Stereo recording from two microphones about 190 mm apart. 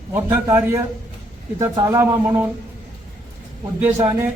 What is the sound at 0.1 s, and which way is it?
A man's voice, 15° right (ahead or behind).